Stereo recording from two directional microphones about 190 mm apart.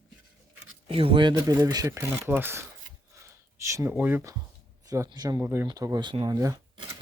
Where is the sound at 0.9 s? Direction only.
30° right (ahead or behind).